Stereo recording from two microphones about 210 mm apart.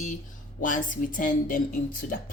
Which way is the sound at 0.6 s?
40° left (ahead or behind).